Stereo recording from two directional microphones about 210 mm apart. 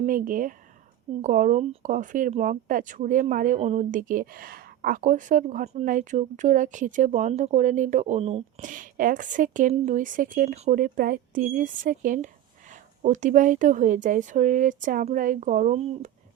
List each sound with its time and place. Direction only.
0.0 s speech: 40° right (ahead or behind)